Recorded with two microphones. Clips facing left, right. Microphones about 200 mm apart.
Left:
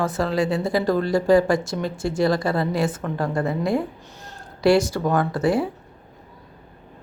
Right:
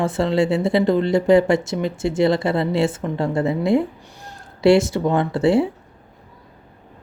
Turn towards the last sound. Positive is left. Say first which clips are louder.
# right 4 dB
turn(degrees=-25)  # may be behind; listen again after turning